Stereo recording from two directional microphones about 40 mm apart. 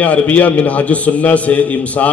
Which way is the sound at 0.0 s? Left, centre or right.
Left.